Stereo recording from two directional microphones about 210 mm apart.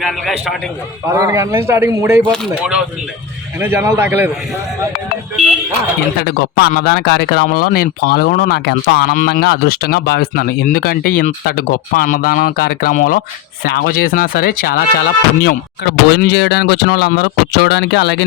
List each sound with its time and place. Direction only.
1.0 s a man's voice: 15° right (ahead or behind)
6.2 s speech: 50° left (ahead or behind)